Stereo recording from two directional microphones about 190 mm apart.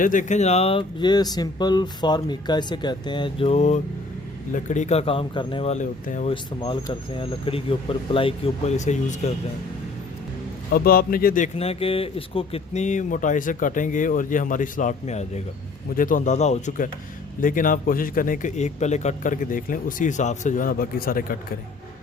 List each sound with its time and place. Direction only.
0.0 s speech: 45° left (ahead or behind)
6.3 s speech: 25° left (ahead or behind)
10.7 s speech: 50° left (ahead or behind)